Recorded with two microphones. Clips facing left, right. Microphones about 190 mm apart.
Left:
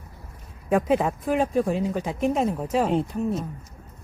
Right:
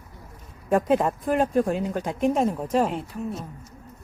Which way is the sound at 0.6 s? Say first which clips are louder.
Even; centre (ahead or behind).